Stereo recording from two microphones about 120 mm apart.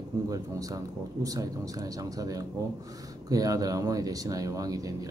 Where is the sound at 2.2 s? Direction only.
30° right (ahead or behind).